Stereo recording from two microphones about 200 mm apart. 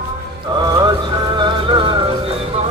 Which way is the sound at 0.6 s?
20° right (ahead or behind).